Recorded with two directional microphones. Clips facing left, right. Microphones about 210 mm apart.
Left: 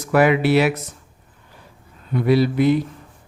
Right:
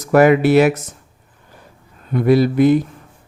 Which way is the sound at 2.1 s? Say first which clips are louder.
Right 3 dB; 50° right (ahead or behind).